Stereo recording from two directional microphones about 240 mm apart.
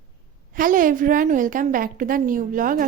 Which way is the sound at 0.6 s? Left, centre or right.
Right.